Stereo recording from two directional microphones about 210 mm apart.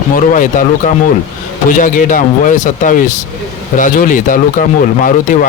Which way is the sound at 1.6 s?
40° left (ahead or behind).